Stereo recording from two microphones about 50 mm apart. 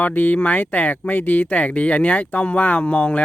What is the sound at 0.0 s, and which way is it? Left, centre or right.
Speech, left.